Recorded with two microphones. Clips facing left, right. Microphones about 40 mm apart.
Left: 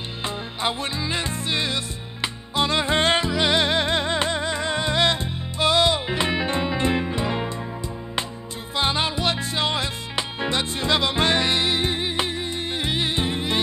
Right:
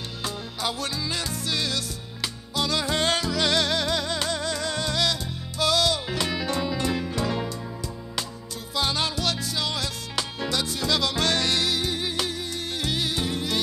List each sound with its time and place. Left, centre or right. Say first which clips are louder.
0.2 s music: left 4 dB; left
8.7 s music: left 3 dB; left